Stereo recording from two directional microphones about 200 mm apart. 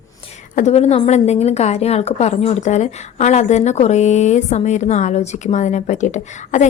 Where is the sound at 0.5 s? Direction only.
35° left (ahead or behind).